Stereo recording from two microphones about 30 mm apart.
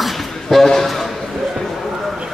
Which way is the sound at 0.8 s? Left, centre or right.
Centre.